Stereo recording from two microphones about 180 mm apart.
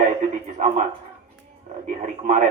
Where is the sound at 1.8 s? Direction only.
45° right (ahead or behind).